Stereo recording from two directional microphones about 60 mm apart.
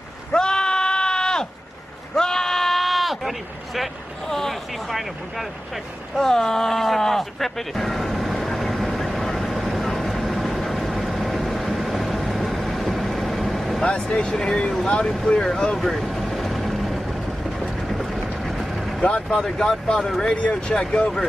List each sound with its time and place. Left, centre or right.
0.3 s sheep: centre
2.1 s bleat: centre
6.1 s a sound: centre
13.8 s speech: centre
16.3 s vehicle: centre
17.9 s boat: centre
18.9 s speech: centre